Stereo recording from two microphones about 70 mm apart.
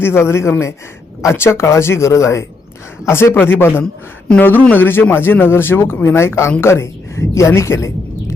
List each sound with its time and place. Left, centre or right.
0.0 s a man's voice: left